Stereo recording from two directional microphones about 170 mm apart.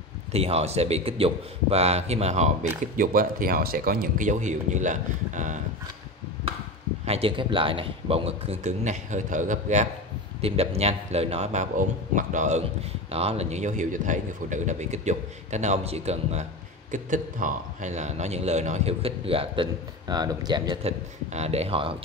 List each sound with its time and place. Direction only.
0.3 s a man's voice: 35° right (ahead or behind)
3.0 s a man's voice: 55° right (ahead or behind)
7.1 s a man's voice: 35° right (ahead or behind)
21.3 s a man's voice: 40° right (ahead or behind)